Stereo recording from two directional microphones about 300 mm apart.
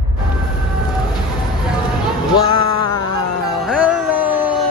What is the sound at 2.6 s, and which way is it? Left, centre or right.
Music, left.